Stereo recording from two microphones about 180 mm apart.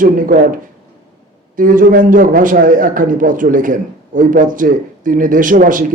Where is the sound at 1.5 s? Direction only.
50° right (ahead or behind).